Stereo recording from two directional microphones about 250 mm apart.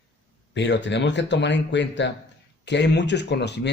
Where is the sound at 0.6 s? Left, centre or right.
Left.